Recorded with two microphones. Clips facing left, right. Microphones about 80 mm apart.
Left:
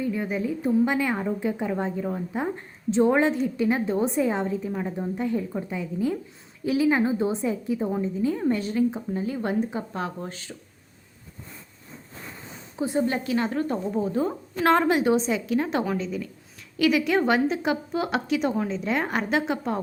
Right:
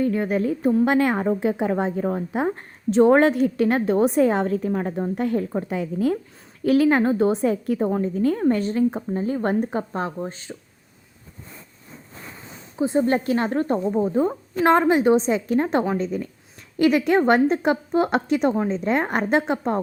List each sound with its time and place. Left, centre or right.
0.1 s a woman's voice: right
4.6 s a woman's voice: right
5.1 s a woman's voice: right
5.4 s a woman's voice: right
5.6 s a woman's voice: right
6.7 s a woman's voice: right
8.4 s a woman's voice: right
10.2 s speech: right
12.7 s a woman's voice: right
13.1 s a woman's voice: right
14.6 s a woman's voice: right